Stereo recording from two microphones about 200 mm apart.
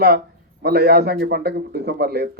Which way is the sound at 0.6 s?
50° right (ahead or behind).